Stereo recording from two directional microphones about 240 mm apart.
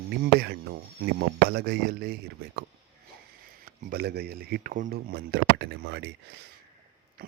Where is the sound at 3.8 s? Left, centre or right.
Right.